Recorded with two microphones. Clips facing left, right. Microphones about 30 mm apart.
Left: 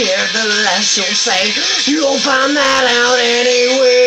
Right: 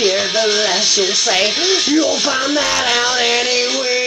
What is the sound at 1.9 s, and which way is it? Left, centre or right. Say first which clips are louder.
Speech: left 2 dB; left.